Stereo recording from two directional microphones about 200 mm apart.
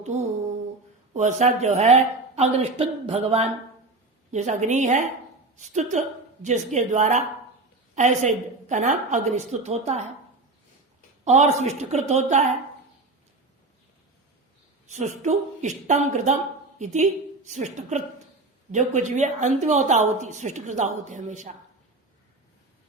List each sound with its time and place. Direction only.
0.0 s a sound: 35° right (ahead or behind)
1.1 s a woman's voice: 35° right (ahead or behind)
11.3 s a woman's voice: 35° right (ahead or behind)
14.8 s a woman's voice: 35° right (ahead or behind)